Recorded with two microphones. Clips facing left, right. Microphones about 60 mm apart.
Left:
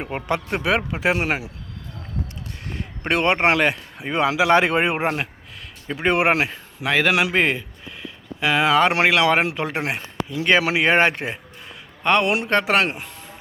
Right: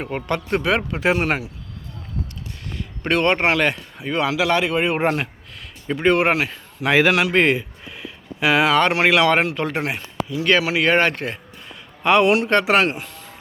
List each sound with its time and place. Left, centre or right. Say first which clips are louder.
0.1 s speech: right 2 dB; centre
3.0 s speech: right 1 dB; centre; by 4.9 s left
4.9 s speech: right 3 dB; centre
6.8 s speech: right 3 dB; centre
7.1 s speech: right 2 dB; centre
8.0 s a sound: right 3 dB; centre
9.0 s speech: right 1 dB; centre
10.0 s speech: right 1 dB; left
12.0 s speech: right 3 dB; centre